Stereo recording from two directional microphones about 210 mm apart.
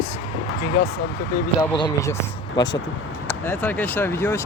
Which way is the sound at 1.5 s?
20° left (ahead or behind).